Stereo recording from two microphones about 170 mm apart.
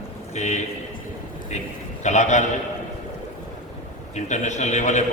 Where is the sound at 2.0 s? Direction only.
45° left (ahead or behind).